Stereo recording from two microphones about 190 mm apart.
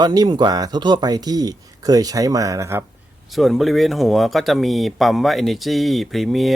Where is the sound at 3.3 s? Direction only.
Centre (ahead or behind).